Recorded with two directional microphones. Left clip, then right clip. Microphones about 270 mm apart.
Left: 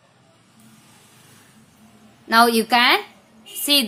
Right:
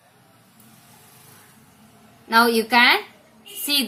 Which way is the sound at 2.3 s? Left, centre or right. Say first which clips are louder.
Left 1 dB; left.